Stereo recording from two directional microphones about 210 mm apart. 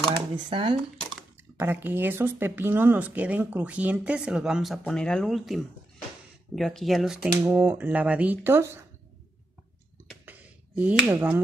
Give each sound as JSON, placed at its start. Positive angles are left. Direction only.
{"t": 0.1, "sound": "speech", "side_deg": -20}
{"t": 1.6, "sound": "speech", "side_deg": -10}
{"t": 10.0, "sound": "a sound", "side_deg": -5}